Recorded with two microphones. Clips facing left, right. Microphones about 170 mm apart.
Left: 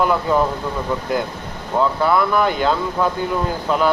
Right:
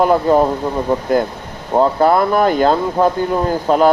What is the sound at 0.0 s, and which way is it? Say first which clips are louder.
Speech: right 5 dB; 45° right (ahead or behind).